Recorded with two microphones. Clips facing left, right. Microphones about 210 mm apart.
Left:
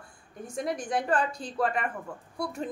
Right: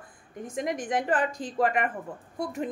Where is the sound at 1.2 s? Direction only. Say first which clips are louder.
Right 1 dB; 90° right.